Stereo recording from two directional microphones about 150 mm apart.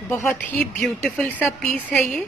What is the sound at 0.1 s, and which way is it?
Speech, 15° left (ahead or behind).